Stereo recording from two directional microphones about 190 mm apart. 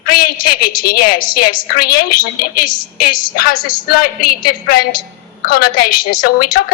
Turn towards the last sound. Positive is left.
turn(degrees=50)  # may be behind; listen again after turning